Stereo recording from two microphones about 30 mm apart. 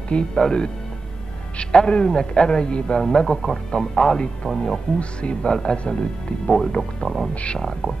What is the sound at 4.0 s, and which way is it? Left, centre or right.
Speech, left.